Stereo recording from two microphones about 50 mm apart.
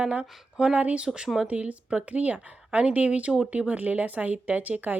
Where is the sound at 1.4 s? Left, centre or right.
Right.